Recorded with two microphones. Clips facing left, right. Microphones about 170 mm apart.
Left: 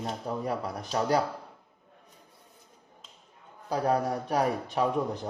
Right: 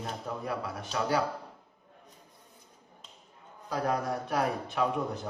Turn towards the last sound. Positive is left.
turn(degrees=35)  # may be behind; listen again after turning